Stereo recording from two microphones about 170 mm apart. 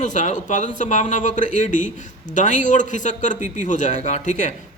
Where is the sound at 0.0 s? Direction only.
45° left (ahead or behind).